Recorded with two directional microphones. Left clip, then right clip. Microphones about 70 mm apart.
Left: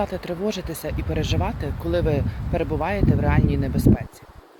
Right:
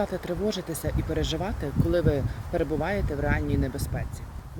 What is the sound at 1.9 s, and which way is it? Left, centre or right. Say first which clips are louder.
Speech: left 2 dB; right.